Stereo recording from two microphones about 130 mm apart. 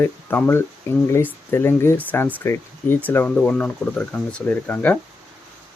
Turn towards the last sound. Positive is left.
turn(degrees=10)  # may be behind; listen again after turning